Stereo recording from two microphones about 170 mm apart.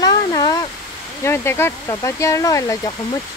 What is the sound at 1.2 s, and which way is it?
Speech, 15° left (ahead or behind).